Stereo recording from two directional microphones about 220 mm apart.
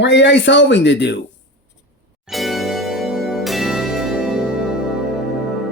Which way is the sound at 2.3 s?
Centre (ahead or behind).